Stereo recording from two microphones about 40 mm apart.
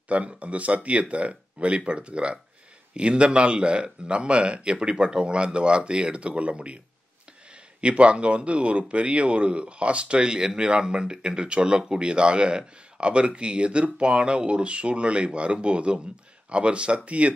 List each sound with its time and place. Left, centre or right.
0.1 s speech: right
7.8 s speech: right